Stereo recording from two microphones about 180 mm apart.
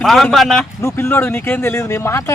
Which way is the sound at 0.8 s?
15° left (ahead or behind).